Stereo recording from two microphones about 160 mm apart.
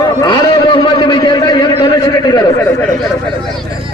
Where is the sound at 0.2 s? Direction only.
25° left (ahead or behind).